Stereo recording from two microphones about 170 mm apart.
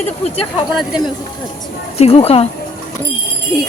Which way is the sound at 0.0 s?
35° left (ahead or behind).